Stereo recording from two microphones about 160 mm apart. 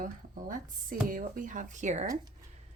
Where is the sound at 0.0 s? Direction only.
60° right (ahead or behind).